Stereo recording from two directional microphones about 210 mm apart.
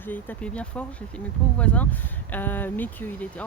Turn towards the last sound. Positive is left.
turn(degrees=10)  # may be behind; listen again after turning